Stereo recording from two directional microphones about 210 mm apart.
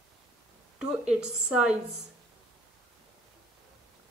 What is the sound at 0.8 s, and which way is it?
Speech, 5° right (ahead or behind).